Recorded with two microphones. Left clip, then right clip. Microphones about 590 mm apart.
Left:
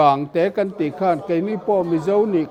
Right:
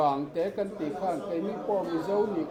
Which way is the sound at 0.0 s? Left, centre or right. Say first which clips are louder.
Left 11 dB; left.